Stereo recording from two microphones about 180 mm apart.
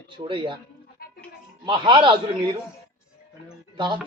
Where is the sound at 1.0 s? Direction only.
55° left (ahead or behind).